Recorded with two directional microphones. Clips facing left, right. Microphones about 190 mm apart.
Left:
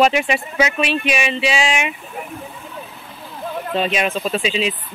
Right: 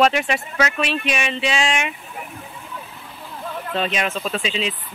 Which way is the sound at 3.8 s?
10° left (ahead or behind).